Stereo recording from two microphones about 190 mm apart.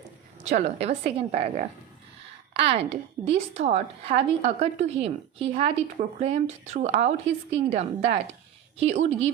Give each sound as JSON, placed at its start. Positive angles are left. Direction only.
{"t": 0.4, "sound": "a woman's voice", "side_deg": -35}